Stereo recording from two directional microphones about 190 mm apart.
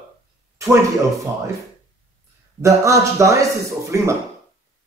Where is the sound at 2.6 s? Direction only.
15° right (ahead or behind).